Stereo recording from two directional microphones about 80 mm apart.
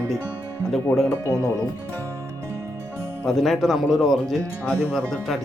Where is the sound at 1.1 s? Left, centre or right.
Left.